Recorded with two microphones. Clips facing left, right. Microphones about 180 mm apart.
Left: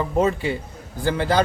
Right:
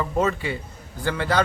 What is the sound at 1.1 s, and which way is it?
Speech, 30° left (ahead or behind).